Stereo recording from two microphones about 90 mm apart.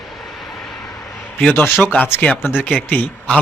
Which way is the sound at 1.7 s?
20° left (ahead or behind).